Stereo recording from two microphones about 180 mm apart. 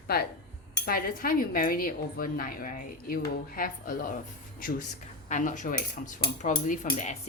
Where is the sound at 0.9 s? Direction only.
50° left (ahead or behind).